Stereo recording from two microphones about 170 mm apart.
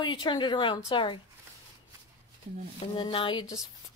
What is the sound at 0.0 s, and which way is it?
Speech, 25° left (ahead or behind).